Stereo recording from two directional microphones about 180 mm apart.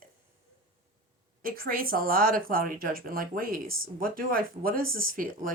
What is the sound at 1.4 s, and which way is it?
A woman's voice, 55° right (ahead or behind).